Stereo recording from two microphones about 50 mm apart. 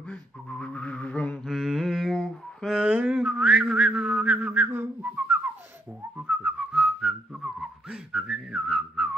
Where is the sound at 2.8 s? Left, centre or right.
Right.